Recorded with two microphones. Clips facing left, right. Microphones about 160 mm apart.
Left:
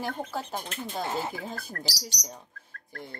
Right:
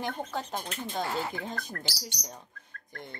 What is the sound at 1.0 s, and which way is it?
Speech, 20° left (ahead or behind).